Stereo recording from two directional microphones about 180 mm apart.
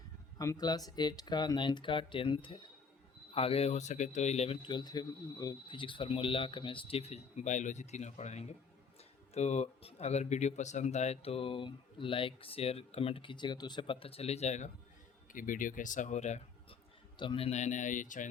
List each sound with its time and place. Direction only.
0.3 s speech: 20° left (ahead or behind); by 16.7 s 40° left (ahead or behind)
17.2 s speech: 30° left (ahead or behind); by 18.3 s 45° left (ahead or behind)